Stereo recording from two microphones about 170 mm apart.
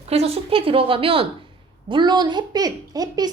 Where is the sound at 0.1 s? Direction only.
35° right (ahead or behind).